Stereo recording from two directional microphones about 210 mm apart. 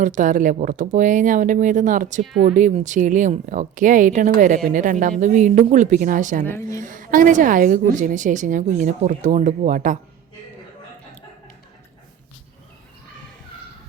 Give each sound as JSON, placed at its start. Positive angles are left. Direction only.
{"t": 0.0, "sound": "a woman's voice", "side_deg": -35}
{"t": 6.4, "sound": "a woman's voice", "side_deg": 10}
{"t": 6.7, "sound": "a woman's voice", "side_deg": -40}